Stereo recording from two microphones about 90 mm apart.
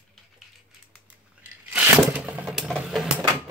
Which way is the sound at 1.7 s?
15° right (ahead or behind).